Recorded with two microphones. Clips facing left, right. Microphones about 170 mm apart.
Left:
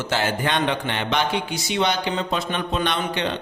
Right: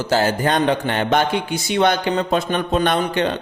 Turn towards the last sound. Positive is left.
turn(degrees=-45)  # may be behind; listen again after turning